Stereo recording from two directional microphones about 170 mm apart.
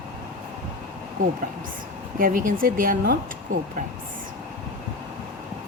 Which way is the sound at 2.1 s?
55° right (ahead or behind).